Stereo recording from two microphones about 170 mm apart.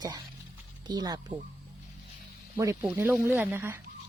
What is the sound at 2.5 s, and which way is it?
Speech, 15° right (ahead or behind).